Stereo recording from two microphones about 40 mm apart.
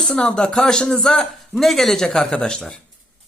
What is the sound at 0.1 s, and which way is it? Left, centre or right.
A man's voice, left.